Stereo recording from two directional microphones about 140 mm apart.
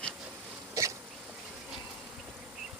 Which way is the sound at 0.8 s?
25° right (ahead or behind).